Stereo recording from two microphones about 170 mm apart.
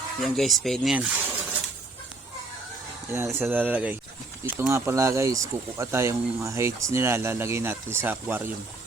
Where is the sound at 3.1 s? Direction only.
15° right (ahead or behind).